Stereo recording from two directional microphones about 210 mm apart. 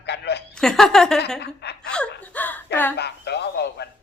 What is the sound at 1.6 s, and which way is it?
Speech, 50° left (ahead or behind).